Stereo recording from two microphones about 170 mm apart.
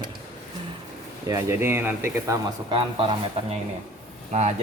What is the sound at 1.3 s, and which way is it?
Speech, 15° right (ahead or behind).